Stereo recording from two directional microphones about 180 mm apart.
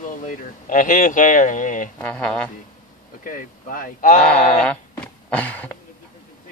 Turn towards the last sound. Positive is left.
turn(degrees=10)  # may be behind; listen again after turning